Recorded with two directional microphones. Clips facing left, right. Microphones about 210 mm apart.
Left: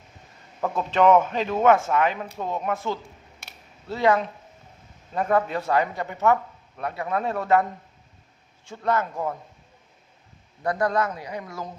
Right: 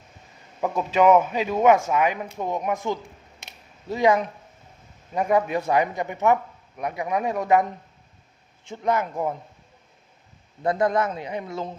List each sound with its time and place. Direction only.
0.6 s speech: 10° right (ahead or behind)
3.4 s a sound: 15° right (ahead or behind)
5.1 s a man's voice: 15° right (ahead or behind)
10.6 s a man's voice: 25° right (ahead or behind)